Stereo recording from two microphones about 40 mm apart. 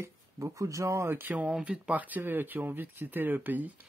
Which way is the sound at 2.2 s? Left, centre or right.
Right.